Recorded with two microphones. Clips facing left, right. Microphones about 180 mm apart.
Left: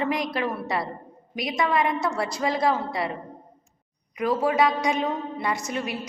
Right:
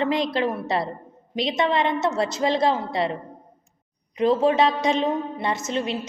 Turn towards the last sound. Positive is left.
turn(degrees=-25)  # may be behind; listen again after turning